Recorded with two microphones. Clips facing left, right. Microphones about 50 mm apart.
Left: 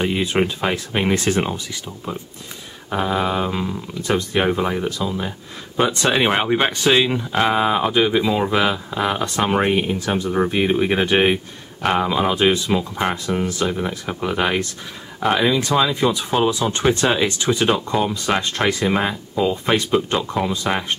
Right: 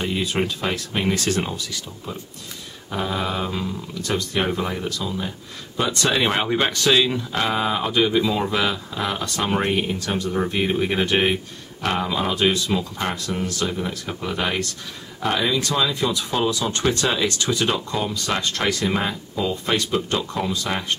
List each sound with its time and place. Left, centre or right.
0.0 s speech: left